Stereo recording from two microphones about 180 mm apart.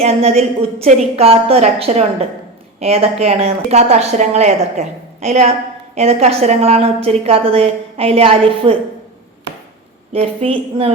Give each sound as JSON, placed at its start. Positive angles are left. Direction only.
{"t": 0.0, "sound": "a woman's voice", "side_deg": -35}
{"t": 10.1, "sound": "a woman's voice", "side_deg": -30}